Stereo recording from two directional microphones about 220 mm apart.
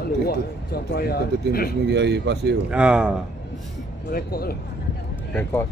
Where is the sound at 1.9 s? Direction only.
50° right (ahead or behind).